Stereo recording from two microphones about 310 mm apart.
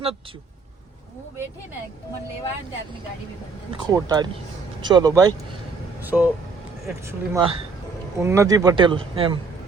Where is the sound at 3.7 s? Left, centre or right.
Centre.